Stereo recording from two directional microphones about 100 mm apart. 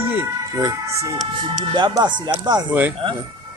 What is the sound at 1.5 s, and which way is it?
Speech, 50° right (ahead or behind).